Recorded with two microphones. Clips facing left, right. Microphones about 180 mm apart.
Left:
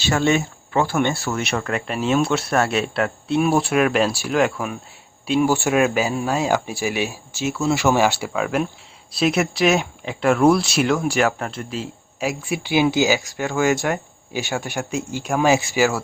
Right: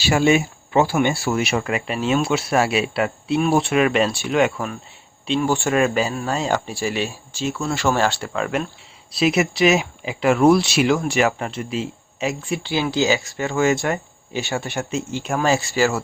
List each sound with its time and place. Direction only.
0.1 s speech: 10° right (ahead or behind)
12.6 s speech: 15° left (ahead or behind)
13.1 s speech: centre (ahead or behind)
15.4 s speech: 15° left (ahead or behind)